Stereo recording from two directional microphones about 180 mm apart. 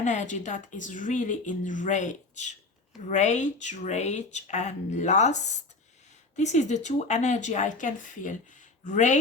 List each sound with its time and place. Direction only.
0.0 s a woman's voice: 40° left (ahead or behind)